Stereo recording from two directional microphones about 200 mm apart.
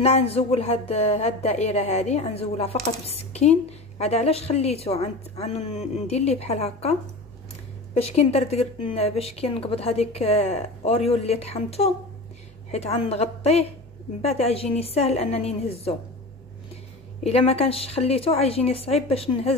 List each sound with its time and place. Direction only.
0.0 s speech: 30° left (ahead or behind)
17.2 s speech: 30° left (ahead or behind)